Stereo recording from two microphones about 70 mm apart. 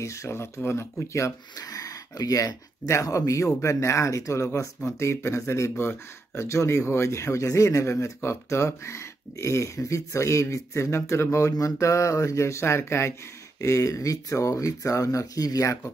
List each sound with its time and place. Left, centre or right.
0.0 s speech: left
1.6 s speech: left
13.6 s speech: left